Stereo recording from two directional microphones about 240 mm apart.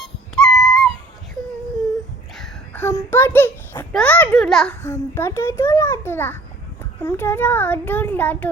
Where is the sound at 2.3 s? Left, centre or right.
Centre.